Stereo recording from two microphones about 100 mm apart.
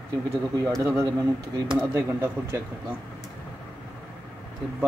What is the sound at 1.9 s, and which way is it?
Speech, 25° right (ahead or behind).